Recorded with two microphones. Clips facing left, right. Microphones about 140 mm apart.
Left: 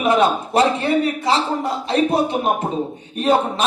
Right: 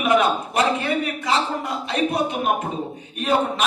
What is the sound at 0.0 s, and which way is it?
A man's voice, 30° left (ahead or behind).